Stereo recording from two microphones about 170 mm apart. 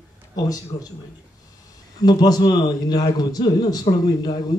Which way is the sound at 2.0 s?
25° left (ahead or behind).